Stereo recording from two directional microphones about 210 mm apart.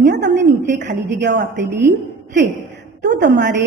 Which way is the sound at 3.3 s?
55° right (ahead or behind).